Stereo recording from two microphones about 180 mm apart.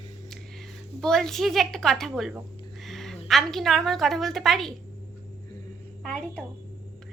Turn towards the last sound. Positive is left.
turn(degrees=5)  # may be behind; listen again after turning